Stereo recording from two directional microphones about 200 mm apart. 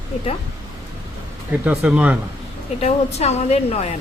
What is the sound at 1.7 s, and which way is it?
Speech, 5° right (ahead or behind).